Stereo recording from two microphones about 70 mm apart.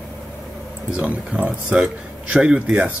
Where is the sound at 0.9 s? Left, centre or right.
Centre.